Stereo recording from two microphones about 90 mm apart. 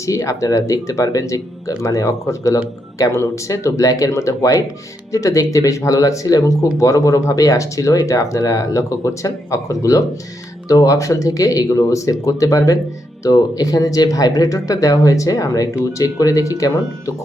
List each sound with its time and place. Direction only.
0.0 s speech: 35° left (ahead or behind)